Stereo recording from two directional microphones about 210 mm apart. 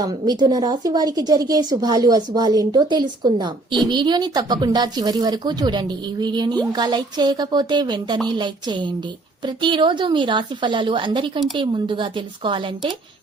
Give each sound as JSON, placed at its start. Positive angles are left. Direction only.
{"t": 0.0, "sound": "a woman's voice", "side_deg": -20}